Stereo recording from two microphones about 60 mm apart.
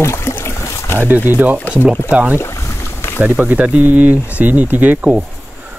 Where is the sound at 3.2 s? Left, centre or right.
Right.